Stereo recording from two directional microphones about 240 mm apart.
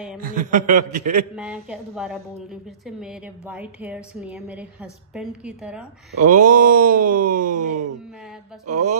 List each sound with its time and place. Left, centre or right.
0.2 s speech: right
1.3 s a woman's voice: centre
6.2 s speech: right
7.6 s speech: right
8.6 s speech: right